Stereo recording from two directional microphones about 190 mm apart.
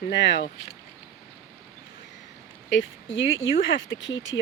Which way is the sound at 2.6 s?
75° left (ahead or behind).